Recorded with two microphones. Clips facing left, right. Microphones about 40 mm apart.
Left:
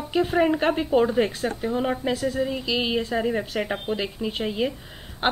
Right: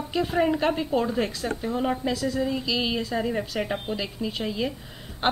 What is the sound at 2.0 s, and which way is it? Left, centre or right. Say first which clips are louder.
Speech: left 1 dB; left.